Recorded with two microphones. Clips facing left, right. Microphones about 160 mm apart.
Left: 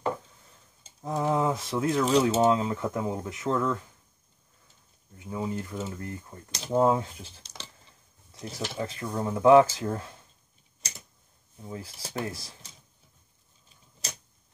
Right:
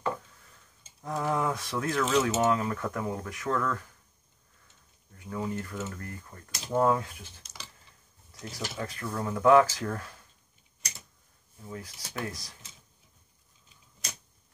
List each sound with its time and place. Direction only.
1.0 s speech: 20° left (ahead or behind)
2.0 s speech: 30° left (ahead or behind)
5.1 s speech: 15° left (ahead or behind)
5.8 s speech: 25° left (ahead or behind)
11.6 s speech: 25° left (ahead or behind)